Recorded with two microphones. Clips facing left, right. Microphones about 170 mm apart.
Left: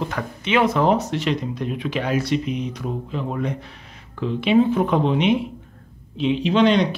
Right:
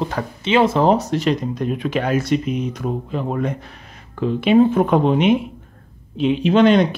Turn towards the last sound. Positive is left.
turn(degrees=-50)  # may be behind; listen again after turning